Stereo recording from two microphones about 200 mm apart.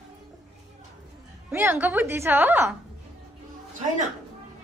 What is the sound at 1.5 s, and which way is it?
A woman's voice, 10° right (ahead or behind).